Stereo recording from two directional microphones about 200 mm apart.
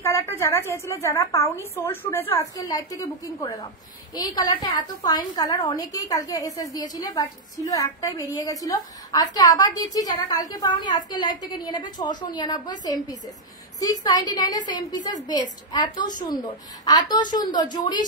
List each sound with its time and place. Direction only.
0.0 s a woman's voice: 10° left (ahead or behind)